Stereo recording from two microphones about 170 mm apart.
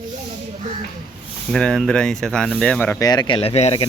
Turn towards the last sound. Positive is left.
turn(degrees=35)  # may be behind; listen again after turning